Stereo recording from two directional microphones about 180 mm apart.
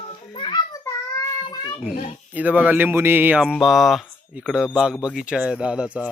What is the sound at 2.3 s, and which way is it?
Speech, 10° right (ahead or behind).